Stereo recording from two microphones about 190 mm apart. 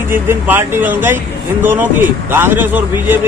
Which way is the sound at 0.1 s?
10° right (ahead or behind).